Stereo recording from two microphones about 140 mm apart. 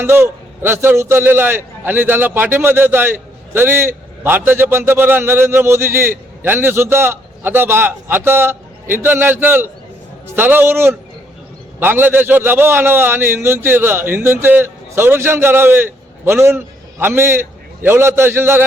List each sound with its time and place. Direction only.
0.0 s a man's voice: 15° right (ahead or behind)